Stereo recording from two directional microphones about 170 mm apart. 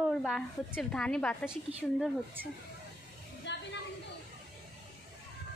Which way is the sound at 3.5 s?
90° left.